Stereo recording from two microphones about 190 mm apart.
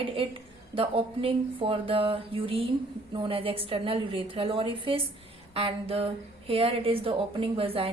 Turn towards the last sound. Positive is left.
turn(degrees=-30)  # may be behind; listen again after turning